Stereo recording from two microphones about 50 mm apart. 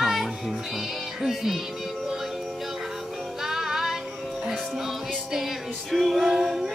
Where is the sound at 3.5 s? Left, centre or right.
Centre.